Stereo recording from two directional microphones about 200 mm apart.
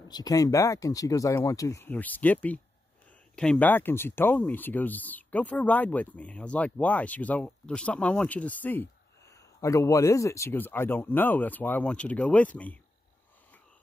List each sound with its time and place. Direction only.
0.1 s speech: 20° left (ahead or behind)